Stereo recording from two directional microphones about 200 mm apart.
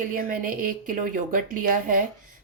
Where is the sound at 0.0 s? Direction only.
45° right (ahead or behind).